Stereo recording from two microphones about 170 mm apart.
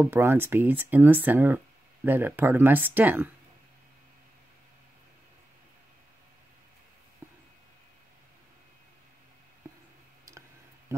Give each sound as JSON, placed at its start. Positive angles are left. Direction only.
{"t": 0.0, "sound": "speech", "side_deg": -15}
{"t": 7.2, "sound": "a sound", "side_deg": -15}
{"t": 10.9, "sound": "speech", "side_deg": -15}